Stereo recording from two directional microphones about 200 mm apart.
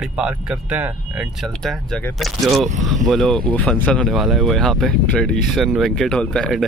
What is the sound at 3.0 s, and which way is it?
Speech, centre (ahead or behind).